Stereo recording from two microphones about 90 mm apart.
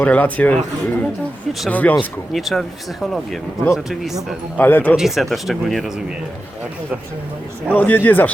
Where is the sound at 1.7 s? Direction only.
20° left (ahead or behind).